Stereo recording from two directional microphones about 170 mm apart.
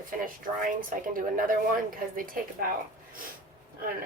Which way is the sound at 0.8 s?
55° right (ahead or behind).